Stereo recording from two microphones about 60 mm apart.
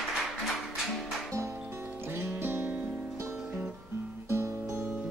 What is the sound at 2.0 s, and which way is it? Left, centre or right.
Music, right.